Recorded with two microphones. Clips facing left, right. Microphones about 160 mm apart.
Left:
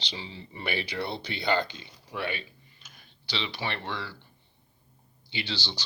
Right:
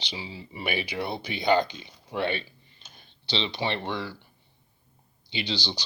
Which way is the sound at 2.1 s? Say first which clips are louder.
Right 5 dB; 30° right (ahead or behind).